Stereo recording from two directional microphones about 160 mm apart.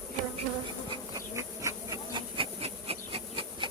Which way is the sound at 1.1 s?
20° right (ahead or behind).